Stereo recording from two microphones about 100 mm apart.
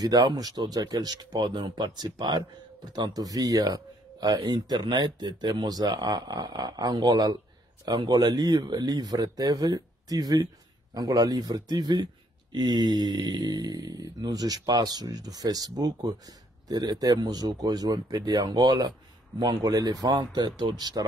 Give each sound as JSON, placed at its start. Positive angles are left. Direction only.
{"t": 0.0, "sound": "speech", "side_deg": -45}